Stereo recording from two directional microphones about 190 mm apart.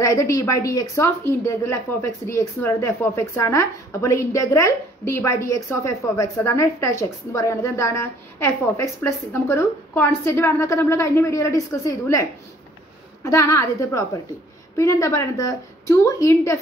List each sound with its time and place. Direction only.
0.0 s speech: 15° left (ahead or behind)